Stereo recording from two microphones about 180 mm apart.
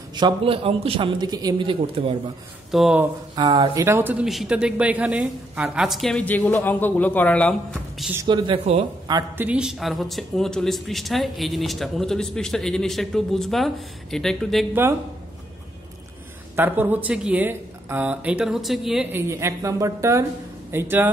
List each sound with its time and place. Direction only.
0.1 s a man's voice: 25° right (ahead or behind)
2.7 s speech: 5° right (ahead or behind)
3.3 s a man's voice: 25° right (ahead or behind)
3.8 s speech: 10° right (ahead or behind); by 7.5 s 5° left (ahead or behind)
8.2 s a man's voice: 25° right (ahead or behind)
9.4 s speech: 5° right (ahead or behind)
14.7 s speech: 10° right (ahead or behind)
16.5 s speech: 10° right (ahead or behind)
19.2 s speech: 15° right (ahead or behind)